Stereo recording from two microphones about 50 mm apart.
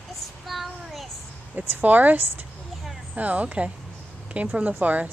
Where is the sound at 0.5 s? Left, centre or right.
Centre.